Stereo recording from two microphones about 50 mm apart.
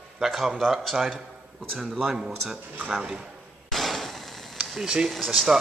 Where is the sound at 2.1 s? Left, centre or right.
Centre.